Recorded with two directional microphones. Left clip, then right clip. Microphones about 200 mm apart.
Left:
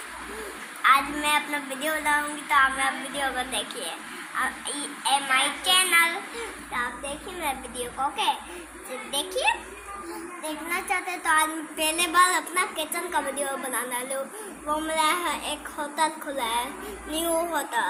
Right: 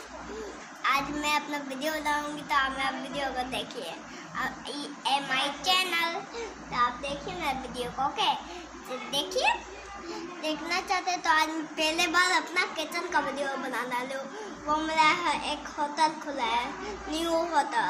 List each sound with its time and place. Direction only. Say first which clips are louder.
0.8 s a sound: left 7 dB; 15° right (ahead or behind)
1.8 s child singing: left 5 dB; 20° right (ahead or behind)
7.4 s a woman's voice: left 2 dB; 25° right (ahead or behind)
10.4 s child singing: even; 10° right (ahead or behind)